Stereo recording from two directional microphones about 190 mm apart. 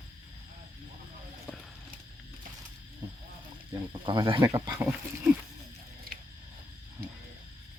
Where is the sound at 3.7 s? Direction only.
25° right (ahead or behind).